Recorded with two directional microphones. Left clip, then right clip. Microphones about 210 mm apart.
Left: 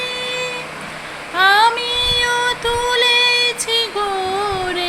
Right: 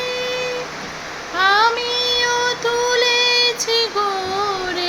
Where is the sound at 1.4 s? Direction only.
20° right (ahead or behind).